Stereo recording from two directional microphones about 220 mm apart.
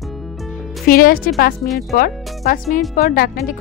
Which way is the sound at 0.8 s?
40° left (ahead or behind).